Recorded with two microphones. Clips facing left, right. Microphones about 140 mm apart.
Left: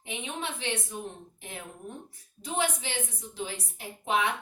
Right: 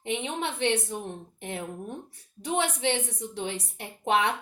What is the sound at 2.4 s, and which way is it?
A woman's voice, 70° right (ahead or behind).